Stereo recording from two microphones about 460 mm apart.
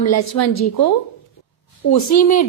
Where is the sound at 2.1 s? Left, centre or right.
Left.